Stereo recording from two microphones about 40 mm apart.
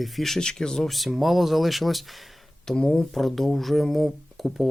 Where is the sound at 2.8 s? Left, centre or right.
Centre.